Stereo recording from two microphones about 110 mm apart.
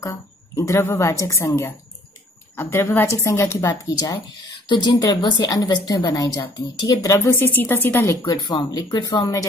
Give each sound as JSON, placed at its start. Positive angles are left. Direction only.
{"t": 0.0, "sound": "a woman's voice", "side_deg": 25}
{"t": 8.3, "sound": "a woman's voice", "side_deg": 40}